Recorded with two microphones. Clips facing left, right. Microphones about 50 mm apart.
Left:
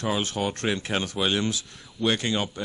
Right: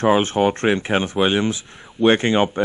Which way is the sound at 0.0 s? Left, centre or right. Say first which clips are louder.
Right 10 dB; right.